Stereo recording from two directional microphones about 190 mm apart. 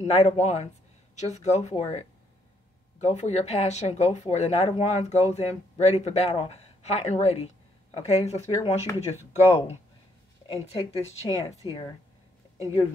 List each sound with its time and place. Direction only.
0.0 s speech: 35° left (ahead or behind)
9.1 s speech: 15° right (ahead or behind)
10.5 s speech: 30° left (ahead or behind)